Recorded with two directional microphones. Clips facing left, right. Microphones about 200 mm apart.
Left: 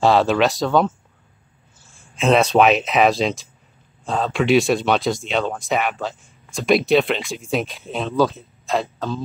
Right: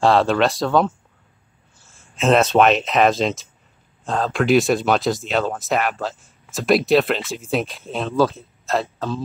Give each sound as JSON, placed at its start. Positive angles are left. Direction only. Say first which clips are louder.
{"t": 0.0, "sound": "speech", "louder": "even", "side_deg": 0}